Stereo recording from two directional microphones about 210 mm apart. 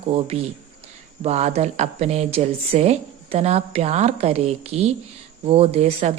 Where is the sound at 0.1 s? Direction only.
30° right (ahead or behind).